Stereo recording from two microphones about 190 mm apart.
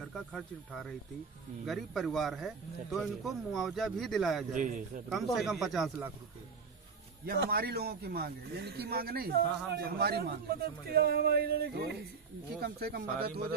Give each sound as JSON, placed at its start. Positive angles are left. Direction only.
{"t": 0.1, "sound": "speech", "side_deg": 0}
{"t": 4.6, "sound": "a man's voice", "side_deg": -45}
{"t": 5.1, "sound": "speech", "side_deg": 0}
{"t": 7.2, "sound": "speech", "side_deg": -55}